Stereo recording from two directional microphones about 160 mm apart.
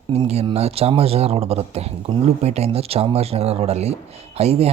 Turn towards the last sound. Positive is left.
turn(degrees=-40)  # may be behind; listen again after turning